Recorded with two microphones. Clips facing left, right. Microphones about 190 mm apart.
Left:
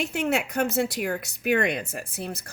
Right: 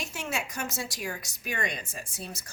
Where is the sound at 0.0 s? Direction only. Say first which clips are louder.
Left 9 dB; 60° left (ahead or behind).